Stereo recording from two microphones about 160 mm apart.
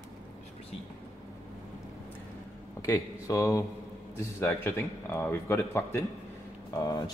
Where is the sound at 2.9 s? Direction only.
20° left (ahead or behind).